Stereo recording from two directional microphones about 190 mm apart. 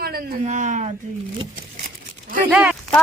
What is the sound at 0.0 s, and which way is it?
Speech, 50° right (ahead or behind).